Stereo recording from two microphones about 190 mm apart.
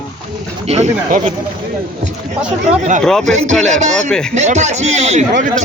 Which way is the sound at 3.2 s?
40° right (ahead or behind).